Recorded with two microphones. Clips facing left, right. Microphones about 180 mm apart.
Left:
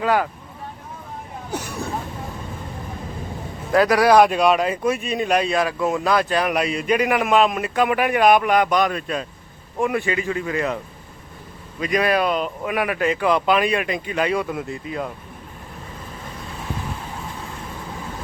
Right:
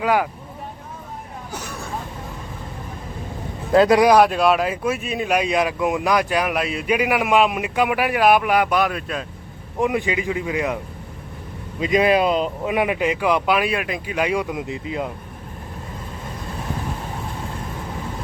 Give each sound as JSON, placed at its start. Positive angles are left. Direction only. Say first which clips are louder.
{"t": 0.0, "sound": "speech", "louder": "even", "side_deg": -10}
{"t": 3.7, "sound": "a man's voice", "louder": "right 3 dB", "side_deg": -25}
{"t": 4.1, "sound": "speech", "louder": "even", "side_deg": 0}
{"t": 9.8, "sound": "speech", "louder": "right 1 dB", "side_deg": -15}
{"t": 11.8, "sound": "speech", "louder": "right 3 dB", "side_deg": -20}